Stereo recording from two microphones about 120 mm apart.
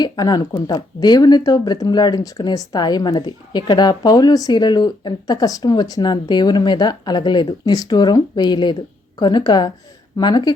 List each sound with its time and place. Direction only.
0.0 s speech: 35° left (ahead or behind)